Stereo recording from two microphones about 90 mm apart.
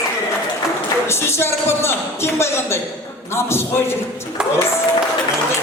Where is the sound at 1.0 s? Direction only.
30° left (ahead or behind).